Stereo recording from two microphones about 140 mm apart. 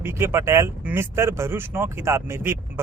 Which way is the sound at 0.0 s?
20° right (ahead or behind).